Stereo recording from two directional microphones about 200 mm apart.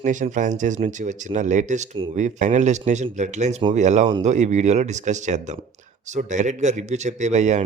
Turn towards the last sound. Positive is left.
turn(degrees=-35)  # may be behind; listen again after turning